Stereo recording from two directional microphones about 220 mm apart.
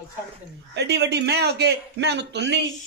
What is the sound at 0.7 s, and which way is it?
A man's voice, 50° right (ahead or behind).